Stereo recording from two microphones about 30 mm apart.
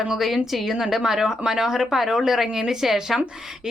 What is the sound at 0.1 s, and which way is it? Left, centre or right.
A woman's voice, centre.